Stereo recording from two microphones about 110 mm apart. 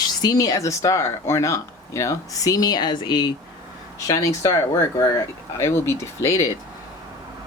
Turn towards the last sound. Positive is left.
turn(degrees=30)  # may be behind; listen again after turning